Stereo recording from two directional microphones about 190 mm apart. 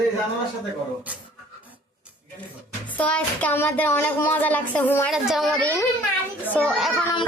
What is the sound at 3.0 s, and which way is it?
Speech, 5° left (ahead or behind).